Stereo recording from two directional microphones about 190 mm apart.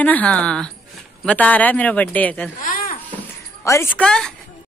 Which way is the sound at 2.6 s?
50° left (ahead or behind).